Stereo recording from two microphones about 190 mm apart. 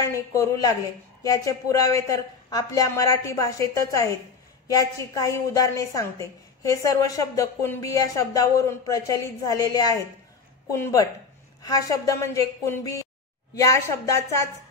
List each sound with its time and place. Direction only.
0.0 s a woman's voice: 15° left (ahead or behind)